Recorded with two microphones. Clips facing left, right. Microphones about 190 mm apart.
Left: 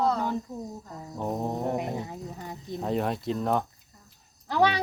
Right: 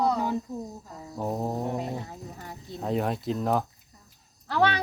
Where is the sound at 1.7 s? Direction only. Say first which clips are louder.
Left 1 dB; 15° left (ahead or behind).